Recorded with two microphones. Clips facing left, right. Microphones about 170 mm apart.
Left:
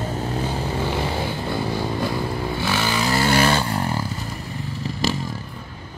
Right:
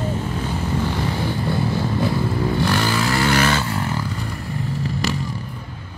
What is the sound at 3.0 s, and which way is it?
Vehicle, 25° left (ahead or behind).